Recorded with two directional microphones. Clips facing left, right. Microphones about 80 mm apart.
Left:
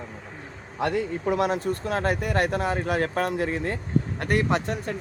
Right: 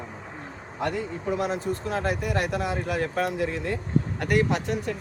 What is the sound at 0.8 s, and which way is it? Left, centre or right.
Speech, left.